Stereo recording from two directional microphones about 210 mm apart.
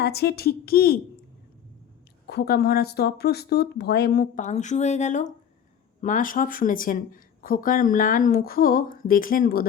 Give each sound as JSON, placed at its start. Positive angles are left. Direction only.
{"t": 0.0, "sound": "speech", "side_deg": 50}
{"t": 2.2, "sound": "speech", "side_deg": 50}